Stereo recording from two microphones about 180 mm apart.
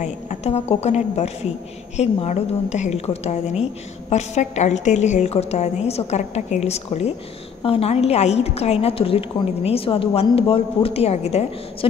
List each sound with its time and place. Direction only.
0.0 s a woman's voice: 40° left (ahead or behind)